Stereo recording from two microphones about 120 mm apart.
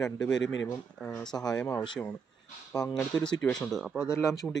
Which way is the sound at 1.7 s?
40° left (ahead or behind).